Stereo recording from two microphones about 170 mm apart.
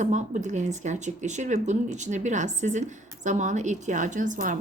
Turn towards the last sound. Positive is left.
turn(degrees=-50)  # may be behind; listen again after turning